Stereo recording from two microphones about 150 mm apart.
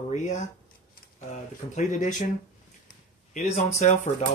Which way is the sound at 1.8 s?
55° left (ahead or behind).